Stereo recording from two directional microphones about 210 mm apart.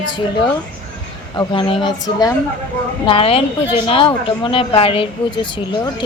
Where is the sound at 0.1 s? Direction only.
20° left (ahead or behind).